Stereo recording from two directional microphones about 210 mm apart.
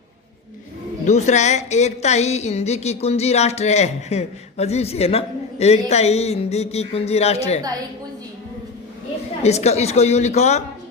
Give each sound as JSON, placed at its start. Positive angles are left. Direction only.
{"t": 1.0, "sound": "a woman's voice", "side_deg": 35}
{"t": 9.4, "sound": "a woman's voice", "side_deg": 30}